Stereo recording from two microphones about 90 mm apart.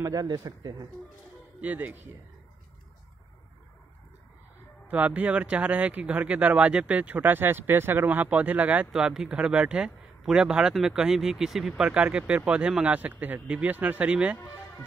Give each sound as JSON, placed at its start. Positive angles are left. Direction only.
{"t": 0.0, "sound": "speech", "side_deg": -45}
{"t": 1.6, "sound": "speech", "side_deg": -20}
{"t": 4.8, "sound": "speech", "side_deg": -20}
{"t": 8.9, "sound": "speech", "side_deg": -5}